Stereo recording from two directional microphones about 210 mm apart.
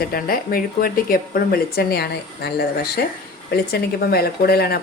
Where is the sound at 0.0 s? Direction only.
45° left (ahead or behind).